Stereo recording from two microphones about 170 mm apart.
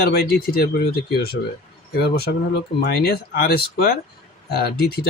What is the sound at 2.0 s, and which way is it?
Speech, 70° left (ahead or behind).